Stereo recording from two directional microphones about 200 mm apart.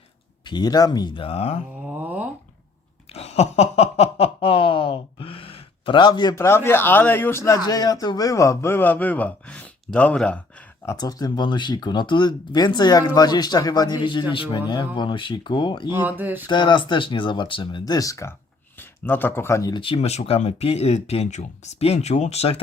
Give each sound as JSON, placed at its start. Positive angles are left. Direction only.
{"t": 0.4, "sound": "speech", "side_deg": 20}
{"t": 1.8, "sound": "a sound", "side_deg": -10}
{"t": 3.1, "sound": "snicker", "side_deg": 30}
{"t": 10.8, "sound": "speech", "side_deg": 20}
{"t": 15.9, "sound": "speech", "side_deg": -10}
{"t": 16.5, "sound": "speech", "side_deg": 25}